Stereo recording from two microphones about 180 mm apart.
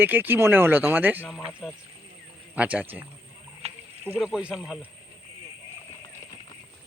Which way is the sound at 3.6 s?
35° right (ahead or behind).